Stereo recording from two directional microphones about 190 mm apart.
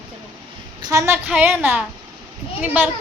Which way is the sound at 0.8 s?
15° right (ahead or behind).